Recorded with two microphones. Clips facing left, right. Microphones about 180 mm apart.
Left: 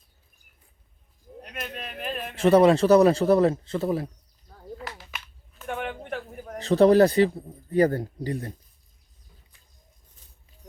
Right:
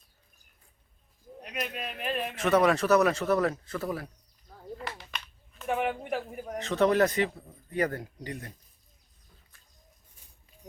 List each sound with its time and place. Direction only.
1.4 s speech: centre (ahead or behind)
2.3 s a man's voice: 30° left (ahead or behind)
4.5 s a sound: centre (ahead or behind)
6.6 s a man's voice: 35° left (ahead or behind)
10.2 s patter: 10° right (ahead or behind)